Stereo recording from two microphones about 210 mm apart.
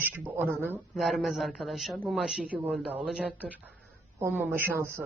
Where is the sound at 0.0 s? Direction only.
10° right (ahead or behind).